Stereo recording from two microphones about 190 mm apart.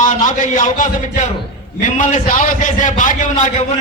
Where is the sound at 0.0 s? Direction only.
40° left (ahead or behind).